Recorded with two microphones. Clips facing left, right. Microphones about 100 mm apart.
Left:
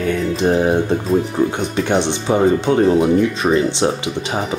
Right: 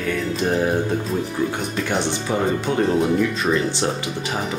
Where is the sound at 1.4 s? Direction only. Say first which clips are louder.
Left 3 dB; 45° left (ahead or behind).